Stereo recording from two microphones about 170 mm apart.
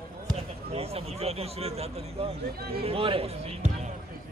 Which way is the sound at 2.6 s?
65° right (ahead or behind).